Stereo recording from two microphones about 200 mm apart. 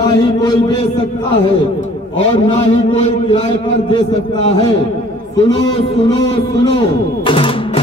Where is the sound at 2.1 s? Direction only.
30° left (ahead or behind).